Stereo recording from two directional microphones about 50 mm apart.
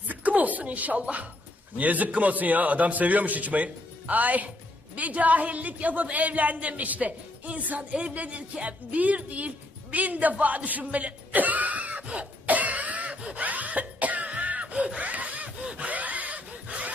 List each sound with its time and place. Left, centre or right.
0.1 s a woman's voice: right
9.9 s a sound: right
13.2 s throat clearing: right